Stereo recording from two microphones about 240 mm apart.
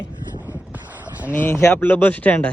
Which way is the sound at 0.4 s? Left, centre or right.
Centre.